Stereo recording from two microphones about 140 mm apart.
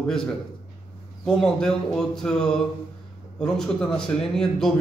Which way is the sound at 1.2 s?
5° left (ahead or behind).